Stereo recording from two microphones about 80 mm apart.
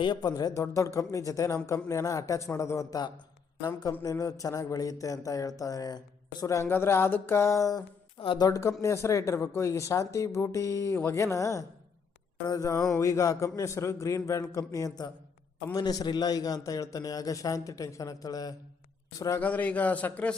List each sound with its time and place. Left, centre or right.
0.0 s a man's voice: left
4.0 s a man's voice: left
6.7 s a man's voice: left
19.4 s a man's voice: centre